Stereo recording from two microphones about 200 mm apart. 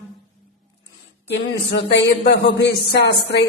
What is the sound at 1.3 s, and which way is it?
Speech, 55° left (ahead or behind).